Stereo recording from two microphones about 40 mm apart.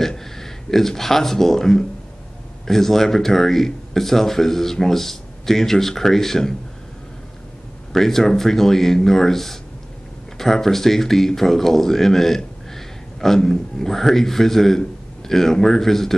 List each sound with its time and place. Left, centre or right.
0.2 s speech: centre
7.9 s speech: centre